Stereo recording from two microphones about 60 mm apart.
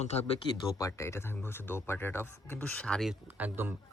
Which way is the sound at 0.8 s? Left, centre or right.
Left.